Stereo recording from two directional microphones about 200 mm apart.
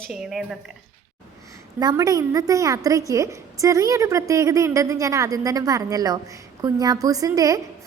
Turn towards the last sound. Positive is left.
turn(degrees=-15)  # may be behind; listen again after turning